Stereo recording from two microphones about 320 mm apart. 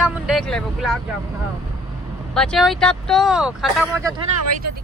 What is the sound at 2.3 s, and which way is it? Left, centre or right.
Speech, centre.